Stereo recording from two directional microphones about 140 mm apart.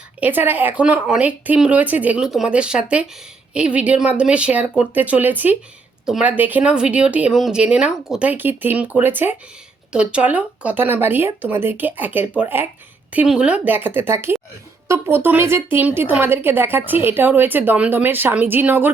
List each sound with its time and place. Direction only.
0.2 s speech: 15° right (ahead or behind)